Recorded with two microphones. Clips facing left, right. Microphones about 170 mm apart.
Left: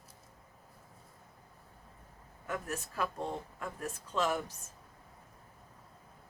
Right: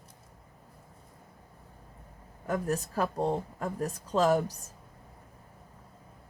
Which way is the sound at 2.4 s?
40° right (ahead or behind).